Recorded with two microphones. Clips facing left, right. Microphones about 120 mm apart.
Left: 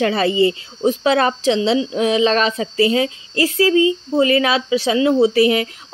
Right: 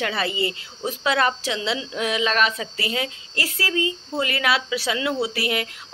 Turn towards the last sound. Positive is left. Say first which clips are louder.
# left 11 dB
turn(degrees=25)  # may be behind; listen again after turning